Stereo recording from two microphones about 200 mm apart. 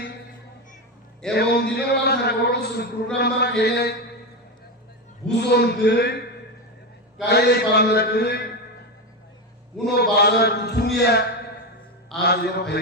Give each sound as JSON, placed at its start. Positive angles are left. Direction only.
{"t": 1.3, "sound": "a man's voice", "side_deg": 55}
{"t": 5.3, "sound": "a man's voice", "side_deg": 55}
{"t": 7.3, "sound": "a man's voice", "side_deg": 55}
{"t": 9.9, "sound": "a man's voice", "side_deg": 55}